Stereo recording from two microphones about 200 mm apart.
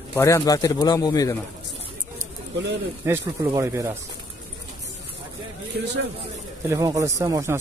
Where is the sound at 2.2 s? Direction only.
65° right (ahead or behind).